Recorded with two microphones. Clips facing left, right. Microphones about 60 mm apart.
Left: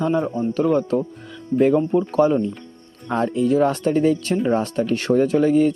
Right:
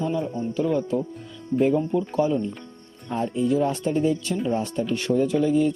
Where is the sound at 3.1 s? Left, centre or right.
Left.